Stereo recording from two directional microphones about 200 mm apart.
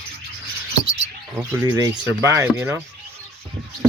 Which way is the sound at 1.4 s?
10° right (ahead or behind).